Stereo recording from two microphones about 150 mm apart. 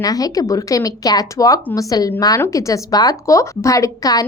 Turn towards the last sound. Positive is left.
turn(degrees=25)  # may be behind; listen again after turning